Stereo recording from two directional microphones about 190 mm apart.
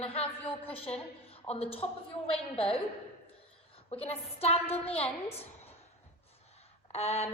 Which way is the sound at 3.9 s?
30° left (ahead or behind).